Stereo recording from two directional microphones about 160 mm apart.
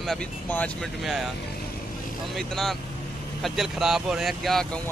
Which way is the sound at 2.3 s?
Centre (ahead or behind).